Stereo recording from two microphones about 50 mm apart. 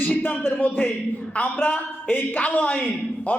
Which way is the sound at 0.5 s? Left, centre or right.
Left.